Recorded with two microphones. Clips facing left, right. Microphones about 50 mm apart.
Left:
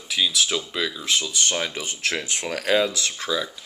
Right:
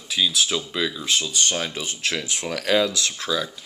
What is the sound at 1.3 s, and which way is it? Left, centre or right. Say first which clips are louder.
Speech: even; left.